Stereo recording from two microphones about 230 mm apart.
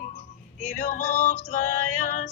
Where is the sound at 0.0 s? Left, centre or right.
Left.